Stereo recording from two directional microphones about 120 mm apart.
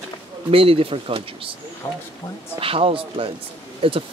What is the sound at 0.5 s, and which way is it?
Speech, 50° right (ahead or behind).